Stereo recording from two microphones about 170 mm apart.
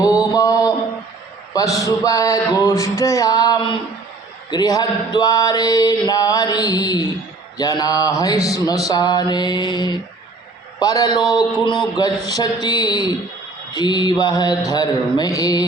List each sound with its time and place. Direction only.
0.0 s mantra: 20° left (ahead or behind)